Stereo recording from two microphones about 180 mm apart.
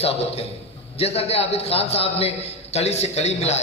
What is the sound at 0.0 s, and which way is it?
A man's voice, 35° left (ahead or behind).